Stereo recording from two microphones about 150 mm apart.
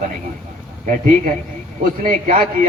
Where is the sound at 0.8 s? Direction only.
65° right (ahead or behind).